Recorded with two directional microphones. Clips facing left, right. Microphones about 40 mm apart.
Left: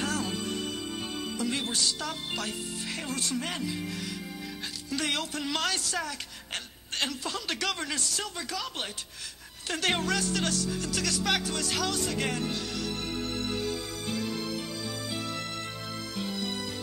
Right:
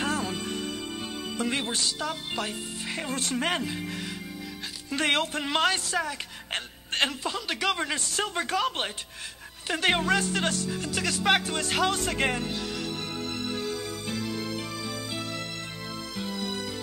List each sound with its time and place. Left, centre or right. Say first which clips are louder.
0.0 s music: right 2 dB; right
1.4 s speech: right 3 dB; right
2.0 s speech: right 3 dB; centre
3.2 s speech: right 6 dB; right
4.8 s a woman's voice: right 6 dB; right
7.2 s speech: right 4 dB; centre; by 8.9 s right
9.7 s speech: right 4 dB; right